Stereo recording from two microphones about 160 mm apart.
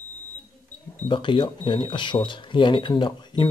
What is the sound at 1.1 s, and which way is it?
Speech, 30° left (ahead or behind).